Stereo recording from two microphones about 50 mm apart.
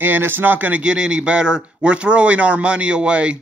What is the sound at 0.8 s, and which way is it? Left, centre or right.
Speech, centre.